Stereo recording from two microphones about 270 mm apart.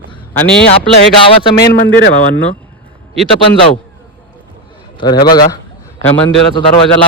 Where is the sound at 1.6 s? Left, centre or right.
Left.